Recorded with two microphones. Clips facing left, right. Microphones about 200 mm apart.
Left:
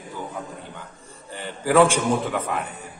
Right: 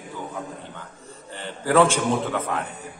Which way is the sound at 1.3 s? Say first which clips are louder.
Left 1 dB; 10° left (ahead or behind).